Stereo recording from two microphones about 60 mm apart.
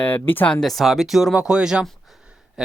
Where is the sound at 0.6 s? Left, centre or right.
Centre.